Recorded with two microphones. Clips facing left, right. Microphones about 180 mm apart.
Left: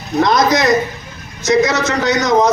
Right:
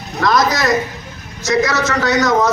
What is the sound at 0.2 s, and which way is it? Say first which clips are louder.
A man's voice: left 3 dB; 20° left (ahead or behind).